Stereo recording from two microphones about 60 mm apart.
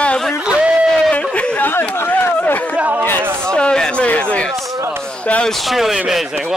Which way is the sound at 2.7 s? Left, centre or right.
Right.